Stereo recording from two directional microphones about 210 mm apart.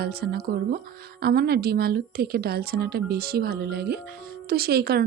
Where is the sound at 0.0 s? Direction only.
45° right (ahead or behind).